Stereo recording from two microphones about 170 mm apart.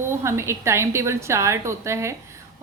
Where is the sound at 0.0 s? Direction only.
15° right (ahead or behind).